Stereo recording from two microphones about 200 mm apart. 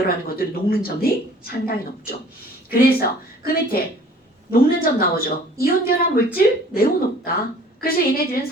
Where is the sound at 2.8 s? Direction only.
50° left (ahead or behind).